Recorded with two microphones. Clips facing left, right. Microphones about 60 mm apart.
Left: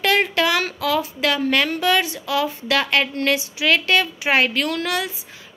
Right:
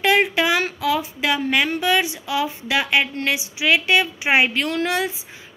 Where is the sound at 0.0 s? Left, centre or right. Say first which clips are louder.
Right 1 dB; centre.